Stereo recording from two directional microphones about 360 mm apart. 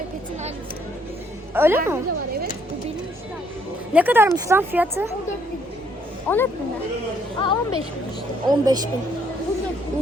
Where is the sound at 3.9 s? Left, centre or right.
Centre.